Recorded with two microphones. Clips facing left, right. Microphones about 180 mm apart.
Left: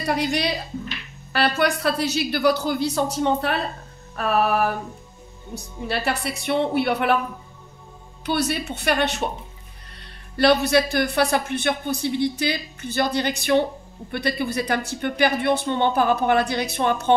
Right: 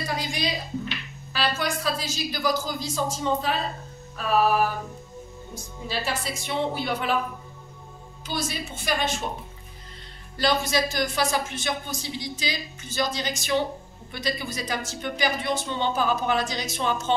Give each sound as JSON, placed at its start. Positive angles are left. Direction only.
{"t": 0.0, "sound": "a woman's voice", "side_deg": 65}
{"t": 8.3, "sound": "a man's voice", "side_deg": 65}
{"t": 10.3, "sound": "a man's voice", "side_deg": 65}